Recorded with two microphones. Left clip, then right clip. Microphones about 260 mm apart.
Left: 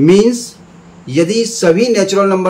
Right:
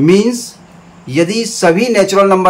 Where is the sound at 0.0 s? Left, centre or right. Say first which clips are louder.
Left 1 dB; centre.